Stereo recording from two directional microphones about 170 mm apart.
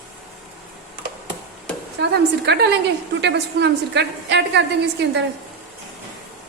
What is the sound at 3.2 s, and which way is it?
A woman's voice, 90° right.